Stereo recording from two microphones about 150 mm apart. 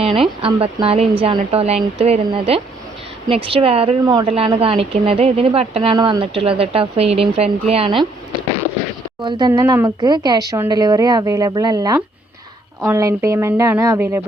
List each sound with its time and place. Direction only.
0.0 s a woman's voice: 40° right (ahead or behind)
4.0 s speech: 25° right (ahead or behind)
4.3 s a woman's voice: 40° right (ahead or behind)
9.5 s speech: 20° right (ahead or behind)